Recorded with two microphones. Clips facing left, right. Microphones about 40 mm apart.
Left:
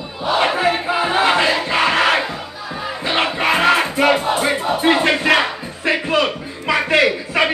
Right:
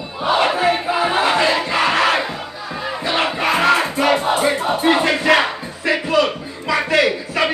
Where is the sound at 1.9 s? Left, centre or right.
Left.